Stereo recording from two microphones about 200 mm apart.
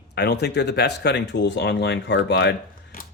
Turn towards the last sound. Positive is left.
turn(degrees=45)  # may be behind; listen again after turning